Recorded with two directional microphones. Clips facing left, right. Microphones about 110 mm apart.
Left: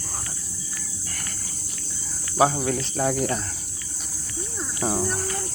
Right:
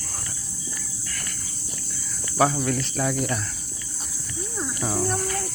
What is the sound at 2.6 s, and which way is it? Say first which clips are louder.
Speech: left 1 dB; 30° left (ahead or behind).